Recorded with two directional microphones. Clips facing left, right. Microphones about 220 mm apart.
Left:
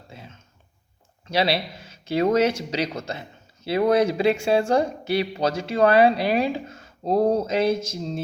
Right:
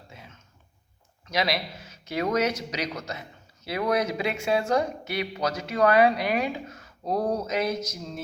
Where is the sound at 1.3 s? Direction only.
30° left (ahead or behind).